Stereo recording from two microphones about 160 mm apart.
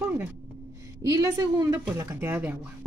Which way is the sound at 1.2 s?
15° right (ahead or behind).